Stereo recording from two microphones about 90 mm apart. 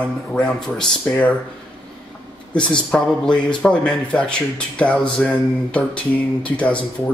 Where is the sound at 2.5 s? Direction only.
10° left (ahead or behind).